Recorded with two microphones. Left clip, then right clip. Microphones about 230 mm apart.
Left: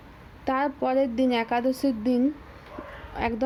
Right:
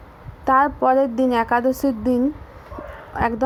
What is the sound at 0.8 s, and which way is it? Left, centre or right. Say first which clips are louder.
A woman's voice: right 7 dB; centre.